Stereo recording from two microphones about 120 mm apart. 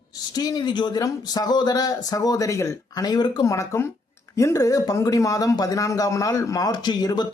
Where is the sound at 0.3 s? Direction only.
35° left (ahead or behind).